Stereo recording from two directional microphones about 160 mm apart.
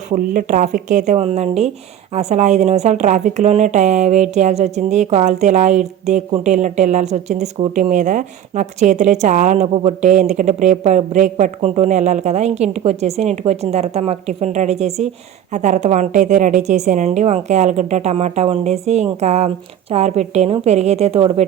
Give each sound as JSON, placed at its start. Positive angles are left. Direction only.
{"t": 0.1, "sound": "speech", "side_deg": -50}